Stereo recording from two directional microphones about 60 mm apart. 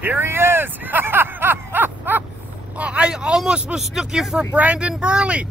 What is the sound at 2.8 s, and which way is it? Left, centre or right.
Speech, centre.